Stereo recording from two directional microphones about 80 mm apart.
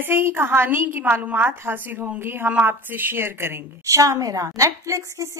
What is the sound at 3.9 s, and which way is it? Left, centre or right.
A woman's voice, right.